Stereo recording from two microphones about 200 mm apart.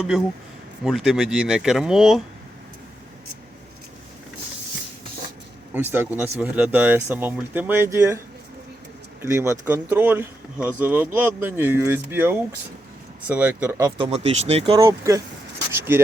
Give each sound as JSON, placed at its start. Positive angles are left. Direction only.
{"t": 0.9, "sound": "speech", "side_deg": 0}
{"t": 5.7, "sound": "speech", "side_deg": -10}
{"t": 9.2, "sound": "speech", "side_deg": -15}
{"t": 14.0, "sound": "speech", "side_deg": -30}
{"t": 14.8, "sound": "speech", "side_deg": -15}
{"t": 15.7, "sound": "a sound", "side_deg": -10}